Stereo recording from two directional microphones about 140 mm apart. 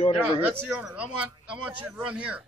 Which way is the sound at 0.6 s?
10° right (ahead or behind).